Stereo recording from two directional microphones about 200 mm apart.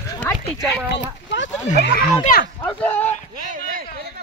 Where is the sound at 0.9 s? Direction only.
60° left (ahead or behind).